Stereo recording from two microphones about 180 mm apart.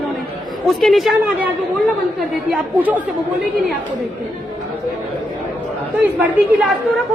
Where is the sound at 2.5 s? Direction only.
10° right (ahead or behind).